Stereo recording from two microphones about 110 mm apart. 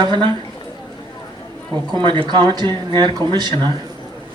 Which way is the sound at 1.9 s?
45° right (ahead or behind).